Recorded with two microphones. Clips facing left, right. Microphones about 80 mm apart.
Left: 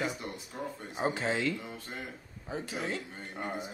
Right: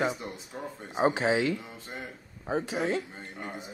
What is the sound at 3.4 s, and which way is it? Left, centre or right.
Speech, left.